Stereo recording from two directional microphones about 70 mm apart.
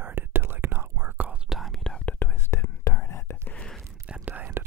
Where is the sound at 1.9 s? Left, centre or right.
Centre.